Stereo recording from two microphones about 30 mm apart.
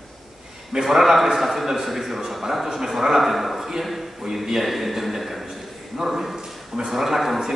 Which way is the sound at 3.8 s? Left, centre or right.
Centre.